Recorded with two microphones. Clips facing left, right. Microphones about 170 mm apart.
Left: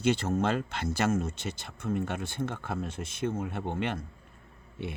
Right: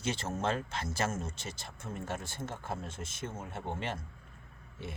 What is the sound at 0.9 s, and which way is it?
A man's voice, 60° left (ahead or behind).